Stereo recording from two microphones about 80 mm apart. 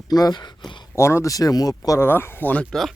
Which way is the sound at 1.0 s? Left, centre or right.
Left.